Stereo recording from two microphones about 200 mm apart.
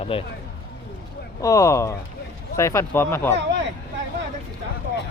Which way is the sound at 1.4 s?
15° left (ahead or behind).